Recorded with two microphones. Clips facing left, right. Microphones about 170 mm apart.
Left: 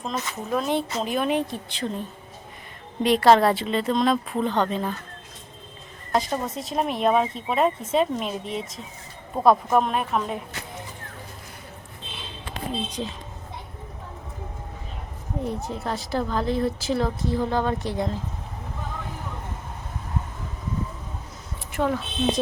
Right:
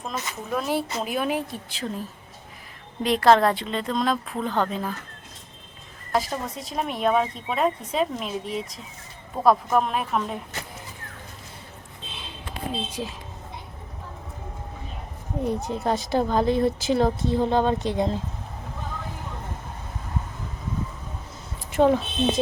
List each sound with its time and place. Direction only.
0.1 s speech: 5° right (ahead or behind)
6.1 s speech: centre (ahead or behind)
12.5 s speech: 10° right (ahead or behind)
15.4 s speech: 20° right (ahead or behind)
21.7 s speech: 25° right (ahead or behind)